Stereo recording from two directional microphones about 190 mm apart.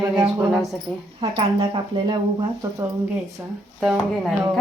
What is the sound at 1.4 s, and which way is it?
Speech, 25° right (ahead or behind).